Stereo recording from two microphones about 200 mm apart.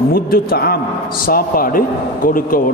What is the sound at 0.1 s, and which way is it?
Speech, 50° left (ahead or behind).